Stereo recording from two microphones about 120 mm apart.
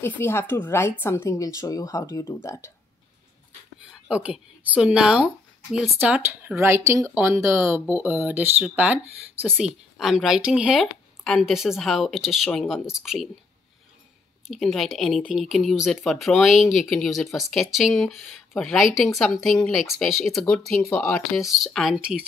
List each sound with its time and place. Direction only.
0.0 s a woman's voice: 20° left (ahead or behind)
4.1 s speech: 10° right (ahead or behind)
14.5 s speech: centre (ahead or behind)